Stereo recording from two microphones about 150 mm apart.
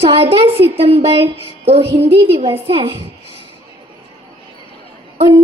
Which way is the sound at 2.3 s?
40° right (ahead or behind).